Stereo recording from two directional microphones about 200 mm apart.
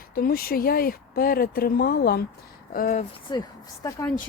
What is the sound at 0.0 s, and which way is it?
Speech, 45° left (ahead or behind).